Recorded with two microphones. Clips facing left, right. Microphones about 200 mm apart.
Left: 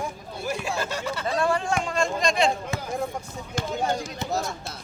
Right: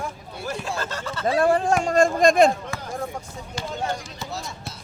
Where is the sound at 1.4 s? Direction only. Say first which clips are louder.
Right 5 dB; 40° right (ahead or behind).